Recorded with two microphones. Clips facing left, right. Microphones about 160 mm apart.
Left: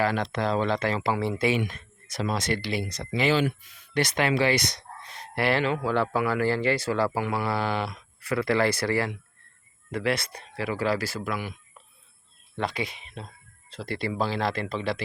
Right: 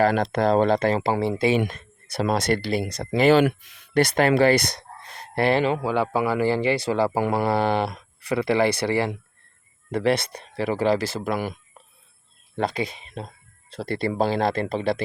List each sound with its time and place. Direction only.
0.0 s speech: 45° right (ahead or behind)
2.1 s speech: 60° right (ahead or behind)
5.5 s speech: 20° right (ahead or behind)
7.1 s speech: 40° right (ahead or behind)
8.2 s speech: 20° right (ahead or behind)
12.5 s speech: 40° right (ahead or behind)
13.7 s speech: 50° right (ahead or behind)